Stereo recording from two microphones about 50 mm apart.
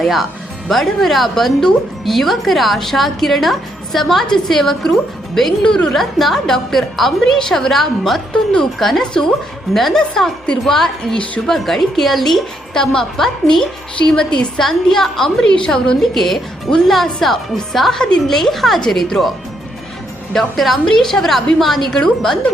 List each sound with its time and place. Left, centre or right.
0.0 s a woman's voice: centre
5.6 s a woman's voice: centre
6.0 s a woman's voice: centre
10.4 s a woman's voice: centre
14.6 s a woman's voice: centre
16.0 s a woman's voice: centre
20.3 s a woman's voice: centre